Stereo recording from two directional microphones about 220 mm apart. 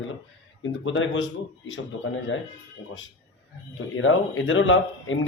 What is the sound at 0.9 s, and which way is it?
Speech, 60° left (ahead or behind).